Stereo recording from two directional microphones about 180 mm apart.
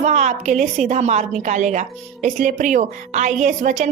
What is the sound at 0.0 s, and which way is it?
A woman's voice, 40° right (ahead or behind).